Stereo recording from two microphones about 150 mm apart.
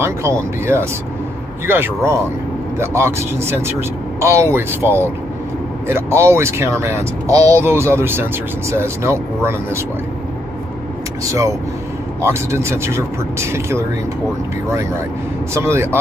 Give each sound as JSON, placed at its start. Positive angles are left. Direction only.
{"t": 0.0, "sound": "speech", "side_deg": -15}
{"t": 12.2, "sound": "speech", "side_deg": -20}
{"t": 15.5, "sound": "speech", "side_deg": -20}